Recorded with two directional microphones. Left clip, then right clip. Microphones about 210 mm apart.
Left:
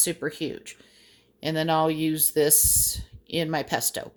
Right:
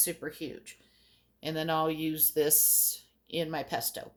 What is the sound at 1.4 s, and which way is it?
A woman's voice, 35° left (ahead or behind).